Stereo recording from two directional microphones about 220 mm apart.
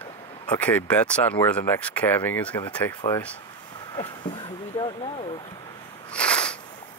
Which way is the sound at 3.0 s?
30° left (ahead or behind).